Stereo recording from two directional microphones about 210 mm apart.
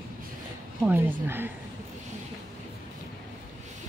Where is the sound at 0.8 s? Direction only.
10° right (ahead or behind).